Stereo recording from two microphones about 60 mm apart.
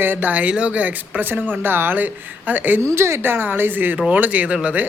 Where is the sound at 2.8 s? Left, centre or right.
Right.